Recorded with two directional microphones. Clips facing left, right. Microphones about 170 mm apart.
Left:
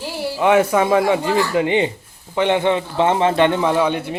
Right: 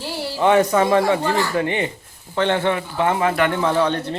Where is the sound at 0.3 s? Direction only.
10° left (ahead or behind).